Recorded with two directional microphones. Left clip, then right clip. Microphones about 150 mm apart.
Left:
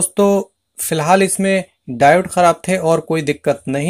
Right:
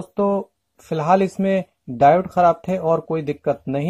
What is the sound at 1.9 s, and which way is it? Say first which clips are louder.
Speech: left 3 dB; centre (ahead or behind).